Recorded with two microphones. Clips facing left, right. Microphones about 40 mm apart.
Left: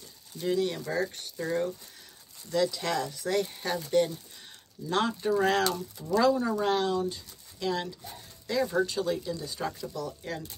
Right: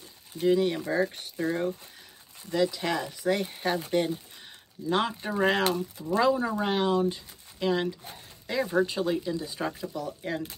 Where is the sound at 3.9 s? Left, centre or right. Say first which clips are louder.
Left 1 dB; right.